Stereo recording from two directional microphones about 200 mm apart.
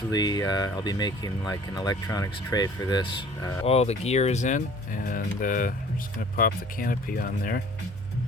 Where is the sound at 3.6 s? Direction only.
30° left (ahead or behind); by 7.6 s 50° left (ahead or behind).